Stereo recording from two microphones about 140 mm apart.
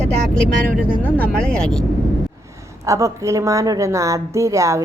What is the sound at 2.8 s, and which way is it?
Speech, 20° right (ahead or behind).